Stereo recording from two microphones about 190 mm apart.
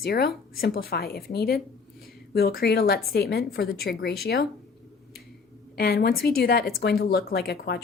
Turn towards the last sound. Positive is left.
turn(degrees=55)  # may be behind; listen again after turning